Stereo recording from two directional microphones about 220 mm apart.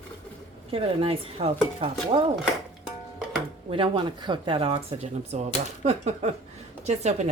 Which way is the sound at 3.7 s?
25° right (ahead or behind).